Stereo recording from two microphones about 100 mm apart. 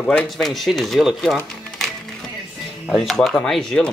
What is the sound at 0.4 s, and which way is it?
Speech, centre (ahead or behind).